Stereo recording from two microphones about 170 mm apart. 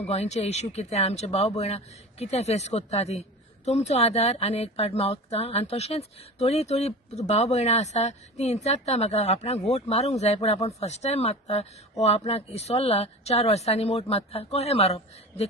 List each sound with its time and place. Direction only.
0.0 s speech: 40° left (ahead or behind)